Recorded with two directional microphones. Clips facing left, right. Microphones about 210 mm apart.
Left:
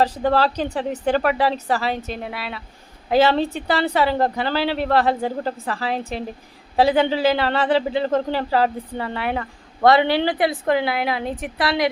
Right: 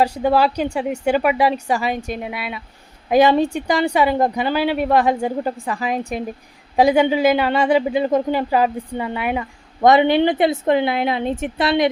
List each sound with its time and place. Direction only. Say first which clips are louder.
0.0 s speech: right 2 dB; 10° right (ahead or behind)